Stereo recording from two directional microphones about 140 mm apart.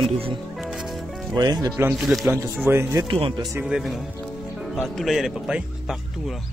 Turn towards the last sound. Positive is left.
turn(degrees=0)  # may be behind; listen again after turning